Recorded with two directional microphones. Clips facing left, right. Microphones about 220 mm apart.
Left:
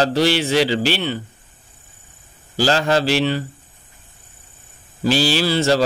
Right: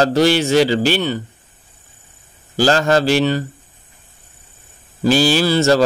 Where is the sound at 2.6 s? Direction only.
45° right (ahead or behind).